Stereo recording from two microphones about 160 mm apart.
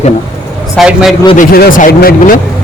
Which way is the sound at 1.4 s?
65° left (ahead or behind).